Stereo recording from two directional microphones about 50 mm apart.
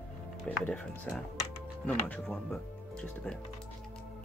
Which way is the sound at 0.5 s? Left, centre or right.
Centre.